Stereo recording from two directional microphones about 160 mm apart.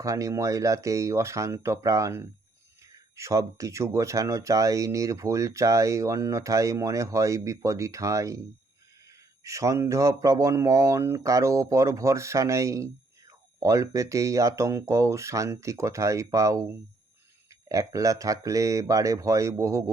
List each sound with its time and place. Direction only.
0.0 s speech: 20° right (ahead or behind)
9.4 s speech: 20° right (ahead or behind)